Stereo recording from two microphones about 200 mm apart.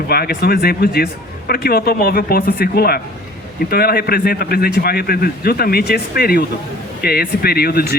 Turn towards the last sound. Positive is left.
turn(degrees=50)  # may be behind; listen again after turning